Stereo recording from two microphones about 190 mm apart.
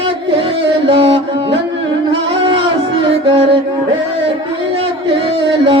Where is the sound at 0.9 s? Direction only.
30° right (ahead or behind).